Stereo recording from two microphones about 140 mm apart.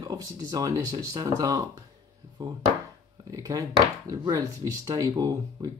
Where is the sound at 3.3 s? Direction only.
25° right (ahead or behind).